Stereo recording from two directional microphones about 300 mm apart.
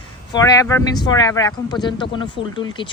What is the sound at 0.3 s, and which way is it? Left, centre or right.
Speech, centre.